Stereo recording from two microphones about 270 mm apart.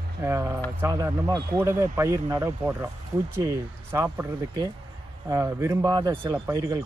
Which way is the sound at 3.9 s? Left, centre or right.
Centre.